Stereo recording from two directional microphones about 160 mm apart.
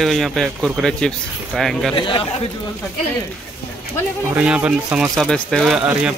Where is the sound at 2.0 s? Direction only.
30° left (ahead or behind).